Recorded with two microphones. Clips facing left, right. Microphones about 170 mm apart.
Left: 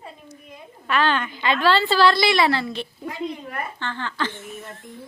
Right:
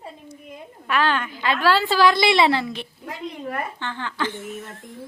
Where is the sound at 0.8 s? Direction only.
5° right (ahead or behind).